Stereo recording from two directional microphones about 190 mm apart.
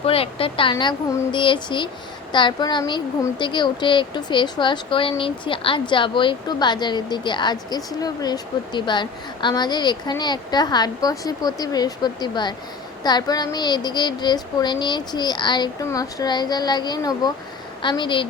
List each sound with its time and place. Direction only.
0.0 s speech: 30° left (ahead or behind)